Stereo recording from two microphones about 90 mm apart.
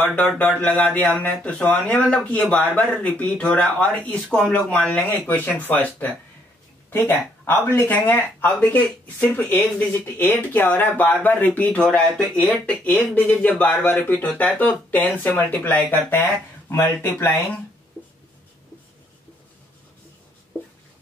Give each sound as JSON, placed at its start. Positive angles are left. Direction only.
{"t": 0.0, "sound": "speech", "side_deg": 15}